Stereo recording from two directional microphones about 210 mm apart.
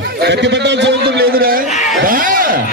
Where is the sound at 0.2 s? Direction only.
55° right (ahead or behind).